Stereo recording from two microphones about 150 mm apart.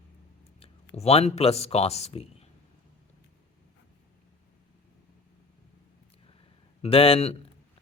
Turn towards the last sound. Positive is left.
turn(degrees=40)  # may be behind; listen again after turning